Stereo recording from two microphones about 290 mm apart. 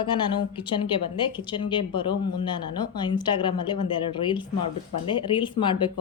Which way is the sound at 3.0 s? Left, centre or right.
Centre.